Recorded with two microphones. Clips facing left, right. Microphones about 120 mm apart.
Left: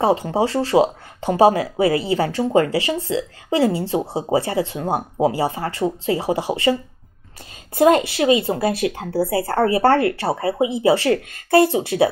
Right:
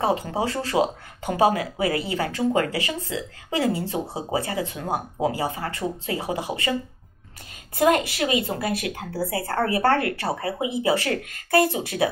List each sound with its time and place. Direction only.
0.0 s speech: 30° left (ahead or behind)
7.7 s speech: 25° left (ahead or behind)